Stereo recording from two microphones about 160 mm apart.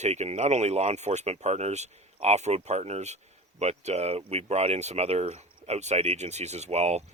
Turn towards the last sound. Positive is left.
turn(degrees=-45)  # may be behind; listen again after turning